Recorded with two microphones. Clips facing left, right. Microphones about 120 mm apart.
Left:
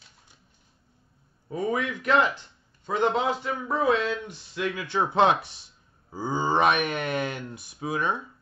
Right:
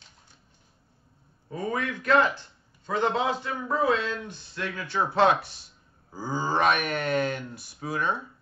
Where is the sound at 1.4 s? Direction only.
15° left (ahead or behind).